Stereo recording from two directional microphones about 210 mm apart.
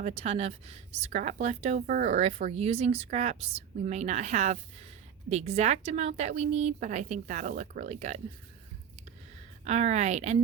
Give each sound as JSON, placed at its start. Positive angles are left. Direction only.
{"t": 0.0, "sound": "a woman's voice", "side_deg": -30}
{"t": 9.6, "sound": "a woman's voice", "side_deg": -30}